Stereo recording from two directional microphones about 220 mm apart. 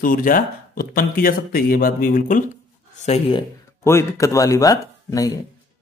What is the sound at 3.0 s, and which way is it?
Speech, 25° left (ahead or behind).